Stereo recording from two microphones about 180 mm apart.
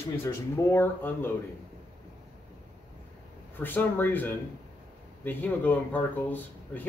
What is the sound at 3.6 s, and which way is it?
Speech, 10° left (ahead or behind).